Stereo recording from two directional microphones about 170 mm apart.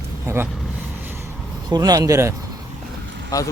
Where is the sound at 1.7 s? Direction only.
20° right (ahead or behind).